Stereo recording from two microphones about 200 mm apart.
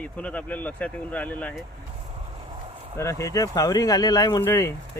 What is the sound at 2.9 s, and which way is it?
Speech, 15° left (ahead or behind).